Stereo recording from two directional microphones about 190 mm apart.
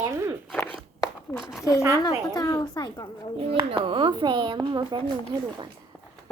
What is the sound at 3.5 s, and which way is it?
A child's voice, 30° right (ahead or behind).